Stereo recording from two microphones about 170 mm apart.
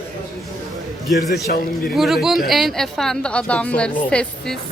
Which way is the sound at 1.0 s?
Centre (ahead or behind).